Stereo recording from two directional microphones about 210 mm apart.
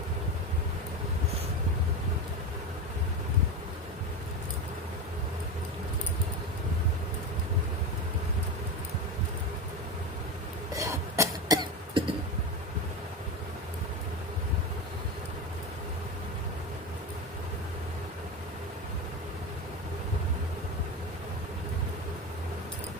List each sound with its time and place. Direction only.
10.8 s cough: 15° right (ahead or behind)